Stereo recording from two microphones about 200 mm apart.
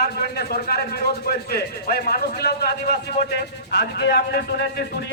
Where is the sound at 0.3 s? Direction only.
50° left (ahead or behind).